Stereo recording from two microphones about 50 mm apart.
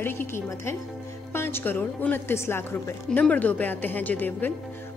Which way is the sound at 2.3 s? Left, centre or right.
Left.